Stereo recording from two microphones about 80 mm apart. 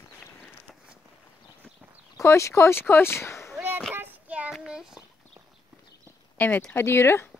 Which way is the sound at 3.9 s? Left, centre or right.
Centre.